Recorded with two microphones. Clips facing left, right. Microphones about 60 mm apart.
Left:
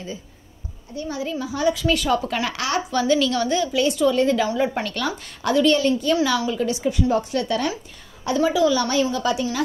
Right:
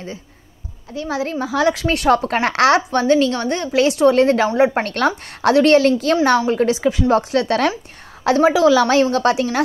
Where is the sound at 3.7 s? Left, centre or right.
Right.